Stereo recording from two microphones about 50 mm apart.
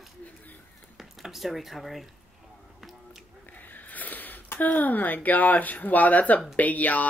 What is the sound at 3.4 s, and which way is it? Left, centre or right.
Speech, left.